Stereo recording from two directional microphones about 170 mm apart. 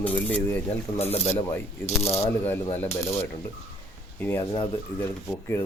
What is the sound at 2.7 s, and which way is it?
Speech, 15° left (ahead or behind).